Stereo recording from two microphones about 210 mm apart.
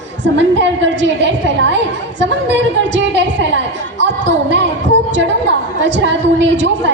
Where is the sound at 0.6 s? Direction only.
60° right (ahead or behind).